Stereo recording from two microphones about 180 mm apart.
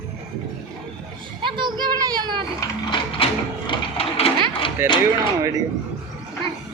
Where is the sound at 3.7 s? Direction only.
35° left (ahead or behind).